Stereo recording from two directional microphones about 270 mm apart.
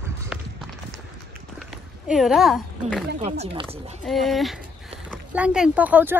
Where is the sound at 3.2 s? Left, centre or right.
Right.